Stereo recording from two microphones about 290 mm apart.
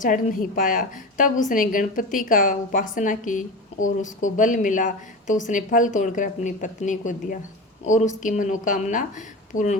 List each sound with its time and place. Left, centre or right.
0.0 s a woman's voice: left